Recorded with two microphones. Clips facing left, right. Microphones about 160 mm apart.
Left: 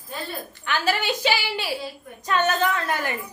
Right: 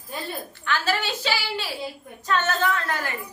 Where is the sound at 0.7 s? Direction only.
15° left (ahead or behind).